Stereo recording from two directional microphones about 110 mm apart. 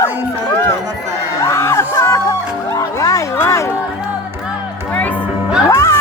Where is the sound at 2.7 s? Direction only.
30° left (ahead or behind).